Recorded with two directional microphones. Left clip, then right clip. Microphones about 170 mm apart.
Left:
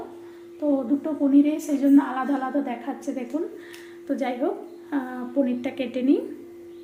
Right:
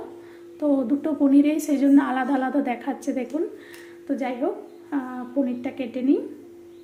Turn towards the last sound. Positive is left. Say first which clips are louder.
# even
turn(degrees=-5)  # may be behind; listen again after turning